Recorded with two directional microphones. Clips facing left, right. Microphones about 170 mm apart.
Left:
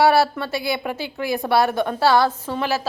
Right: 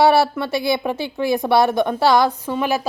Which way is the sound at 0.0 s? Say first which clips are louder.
Right 2 dB; 20° right (ahead or behind).